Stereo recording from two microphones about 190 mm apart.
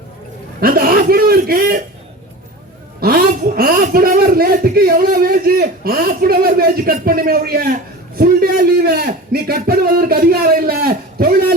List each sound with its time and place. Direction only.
0.6 s chuckle: 50° right (ahead or behind)
3.0 s a man's voice: 50° right (ahead or behind)